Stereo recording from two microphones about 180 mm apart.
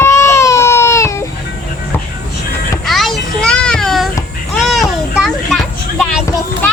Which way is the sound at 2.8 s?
Centre (ahead or behind).